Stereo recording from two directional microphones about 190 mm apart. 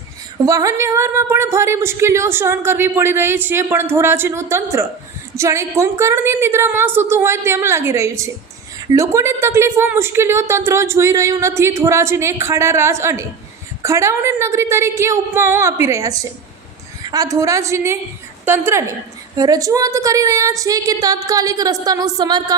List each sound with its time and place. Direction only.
0.4 s a woman's voice: 15° right (ahead or behind)